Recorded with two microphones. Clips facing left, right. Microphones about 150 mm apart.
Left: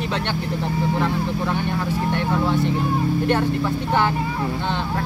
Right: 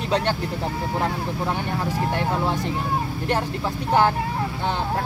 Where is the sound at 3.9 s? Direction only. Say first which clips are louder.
Right 3 dB; 35° right (ahead or behind).